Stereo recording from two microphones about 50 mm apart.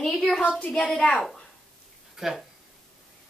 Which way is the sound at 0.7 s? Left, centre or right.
Centre.